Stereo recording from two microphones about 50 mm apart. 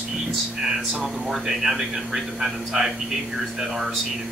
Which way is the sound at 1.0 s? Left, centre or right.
Centre.